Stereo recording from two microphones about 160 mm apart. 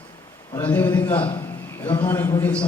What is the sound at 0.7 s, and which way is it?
Speech, 10° left (ahead or behind).